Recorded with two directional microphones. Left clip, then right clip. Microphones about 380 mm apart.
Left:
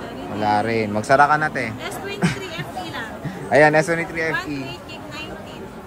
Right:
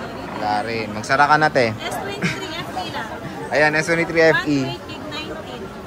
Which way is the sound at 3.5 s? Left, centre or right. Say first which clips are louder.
Left 3 dB; centre.